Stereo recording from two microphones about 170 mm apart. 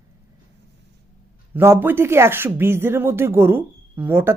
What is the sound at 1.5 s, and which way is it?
Speech, 15° right (ahead or behind).